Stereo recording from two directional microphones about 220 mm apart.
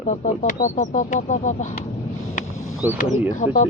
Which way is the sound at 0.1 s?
35° left (ahead or behind).